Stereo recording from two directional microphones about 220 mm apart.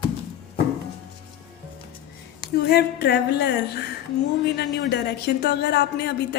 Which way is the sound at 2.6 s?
50° left (ahead or behind).